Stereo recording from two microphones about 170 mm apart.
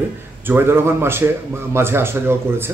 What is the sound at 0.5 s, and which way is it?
A man's voice, 15° right (ahead or behind).